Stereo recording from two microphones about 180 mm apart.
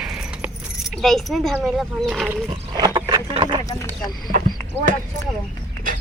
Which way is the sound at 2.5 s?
25° right (ahead or behind).